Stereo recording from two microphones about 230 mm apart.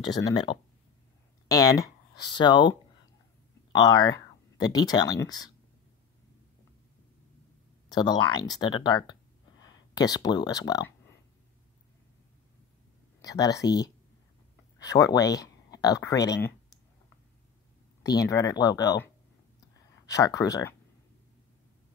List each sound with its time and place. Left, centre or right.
0.0 s speech: centre
3.8 s speech: centre
7.9 s speech: centre
13.2 s speech: centre
18.0 s speech: centre
20.1 s speech: centre